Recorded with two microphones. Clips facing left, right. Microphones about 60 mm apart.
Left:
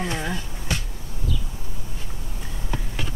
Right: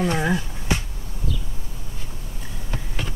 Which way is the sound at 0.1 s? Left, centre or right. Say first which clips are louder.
Right 6 dB; centre.